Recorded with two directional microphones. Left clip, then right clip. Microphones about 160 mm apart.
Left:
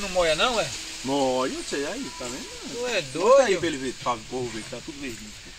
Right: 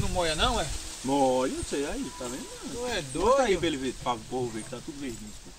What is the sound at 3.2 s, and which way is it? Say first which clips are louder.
Speech: left 5 dB; 5° right (ahead or behind).